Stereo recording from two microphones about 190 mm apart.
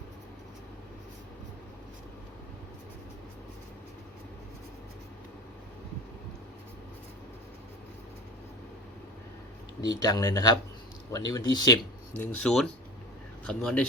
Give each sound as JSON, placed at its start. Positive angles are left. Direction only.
{"t": 9.8, "sound": "speech", "side_deg": 20}
{"t": 12.1, "sound": "speech", "side_deg": 5}